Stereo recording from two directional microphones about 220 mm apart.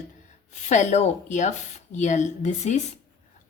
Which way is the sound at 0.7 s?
30° left (ahead or behind).